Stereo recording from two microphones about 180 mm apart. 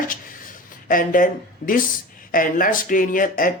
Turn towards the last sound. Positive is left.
turn(degrees=50)  # may be behind; listen again after turning